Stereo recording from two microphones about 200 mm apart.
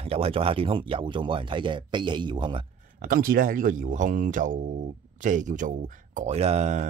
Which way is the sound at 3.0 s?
45° right (ahead or behind).